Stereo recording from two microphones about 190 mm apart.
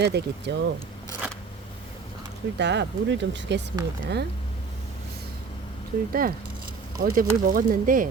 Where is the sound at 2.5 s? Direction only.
65° right (ahead or behind).